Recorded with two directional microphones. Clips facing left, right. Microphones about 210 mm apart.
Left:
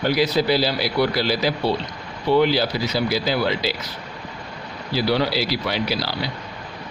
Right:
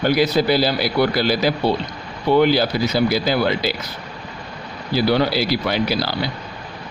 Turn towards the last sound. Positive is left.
turn(degrees=-50)  # may be behind; listen again after turning